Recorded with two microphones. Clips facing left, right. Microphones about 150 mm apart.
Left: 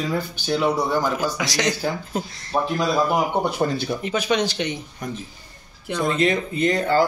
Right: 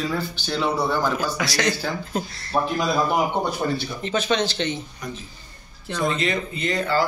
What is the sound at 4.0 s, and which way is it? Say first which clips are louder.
Speech: right 1 dB; 10° left (ahead or behind).